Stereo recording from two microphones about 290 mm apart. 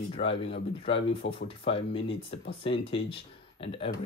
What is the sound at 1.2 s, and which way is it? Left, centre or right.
Speech, left.